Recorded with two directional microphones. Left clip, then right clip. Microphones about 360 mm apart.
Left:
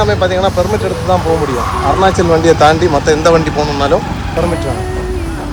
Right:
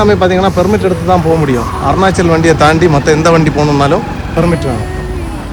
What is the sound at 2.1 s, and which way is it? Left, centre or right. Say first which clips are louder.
Speech: even; centre.